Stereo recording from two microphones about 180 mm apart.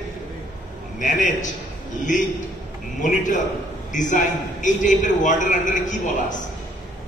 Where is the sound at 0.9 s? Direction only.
45° left (ahead or behind).